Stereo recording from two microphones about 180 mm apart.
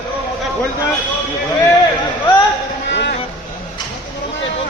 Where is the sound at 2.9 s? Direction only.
75° left (ahead or behind).